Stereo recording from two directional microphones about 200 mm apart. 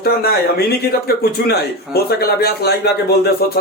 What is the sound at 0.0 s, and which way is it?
Speech, 50° left (ahead or behind).